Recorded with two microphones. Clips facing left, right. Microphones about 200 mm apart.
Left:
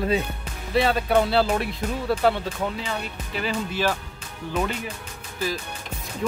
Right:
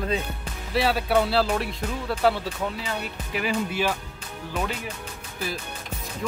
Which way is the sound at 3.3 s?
10° right (ahead or behind).